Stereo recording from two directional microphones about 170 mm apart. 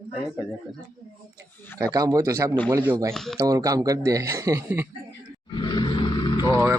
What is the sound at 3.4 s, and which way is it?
Speech, 20° right (ahead or behind).